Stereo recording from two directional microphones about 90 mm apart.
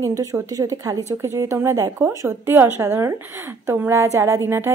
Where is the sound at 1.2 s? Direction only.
30° right (ahead or behind).